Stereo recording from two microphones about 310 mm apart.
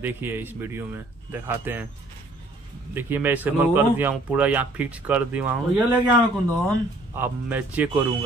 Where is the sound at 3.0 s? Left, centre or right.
Centre.